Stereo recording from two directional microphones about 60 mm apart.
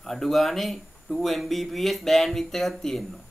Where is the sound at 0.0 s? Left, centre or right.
Centre.